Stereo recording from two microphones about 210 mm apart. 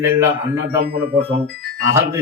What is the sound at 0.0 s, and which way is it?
Speech, 10° right (ahead or behind).